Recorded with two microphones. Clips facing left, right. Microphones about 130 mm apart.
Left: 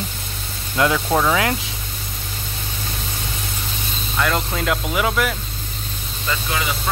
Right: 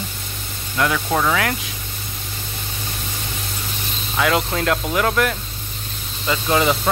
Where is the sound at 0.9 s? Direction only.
10° left (ahead or behind).